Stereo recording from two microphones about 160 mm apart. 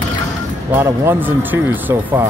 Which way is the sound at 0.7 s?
15° right (ahead or behind).